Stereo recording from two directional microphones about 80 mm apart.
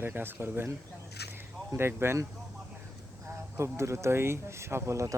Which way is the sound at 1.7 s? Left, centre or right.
Right.